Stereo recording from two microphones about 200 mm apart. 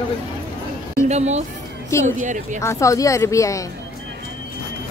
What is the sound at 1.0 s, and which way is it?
Speech, 35° right (ahead or behind).